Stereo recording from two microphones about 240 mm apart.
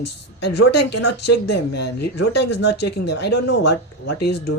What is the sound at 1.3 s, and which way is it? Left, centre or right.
Speech, left.